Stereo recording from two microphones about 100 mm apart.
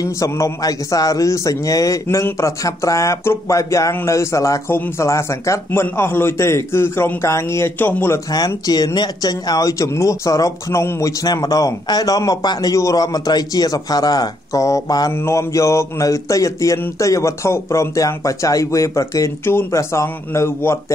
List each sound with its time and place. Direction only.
0.0 s a man's voice: 35° left (ahead or behind)
8.5 s speech: 40° left (ahead or behind)